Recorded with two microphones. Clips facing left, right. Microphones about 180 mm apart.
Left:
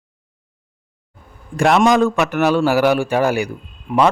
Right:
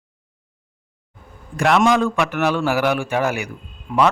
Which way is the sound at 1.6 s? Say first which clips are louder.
Left 3 dB; 35° left (ahead or behind).